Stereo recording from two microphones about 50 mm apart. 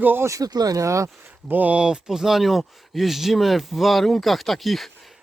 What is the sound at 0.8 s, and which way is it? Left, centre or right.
Speech, right.